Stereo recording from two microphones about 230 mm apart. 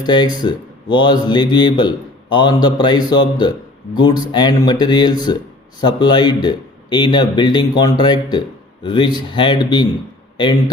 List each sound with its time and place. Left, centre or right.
0.0 s speech: centre